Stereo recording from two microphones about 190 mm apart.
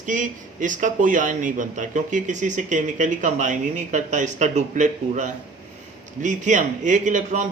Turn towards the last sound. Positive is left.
turn(degrees=-40)  # may be behind; listen again after turning